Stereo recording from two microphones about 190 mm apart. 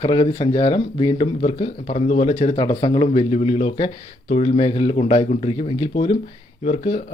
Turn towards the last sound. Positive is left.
turn(degrees=35)  # may be behind; listen again after turning